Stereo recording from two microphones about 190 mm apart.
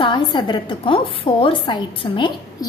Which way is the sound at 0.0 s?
25° left (ahead or behind).